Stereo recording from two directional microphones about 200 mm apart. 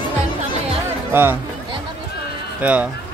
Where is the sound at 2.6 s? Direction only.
5° right (ahead or behind).